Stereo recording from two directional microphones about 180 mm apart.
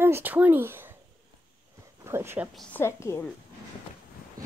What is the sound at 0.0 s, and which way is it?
Speech, 10° right (ahead or behind).